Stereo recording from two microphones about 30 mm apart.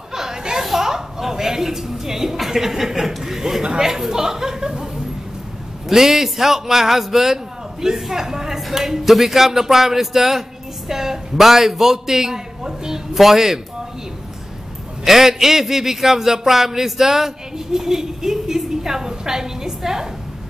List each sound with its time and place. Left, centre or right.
0.1 s a sound: centre
0.7 s a woman's voice: centre
3.8 s chuckle: centre
5.9 s a man's voice: centre
15.0 s a man's voice: centre